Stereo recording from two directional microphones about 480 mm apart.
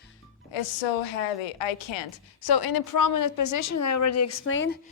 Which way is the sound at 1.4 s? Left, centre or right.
Left.